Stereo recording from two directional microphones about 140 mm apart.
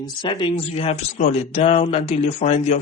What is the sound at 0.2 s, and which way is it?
Speech, 35° left (ahead or behind).